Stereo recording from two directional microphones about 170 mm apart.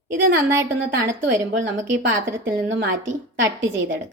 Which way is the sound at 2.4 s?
75° right (ahead or behind).